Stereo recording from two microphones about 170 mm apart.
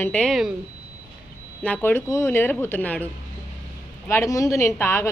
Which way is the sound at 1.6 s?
10° left (ahead or behind).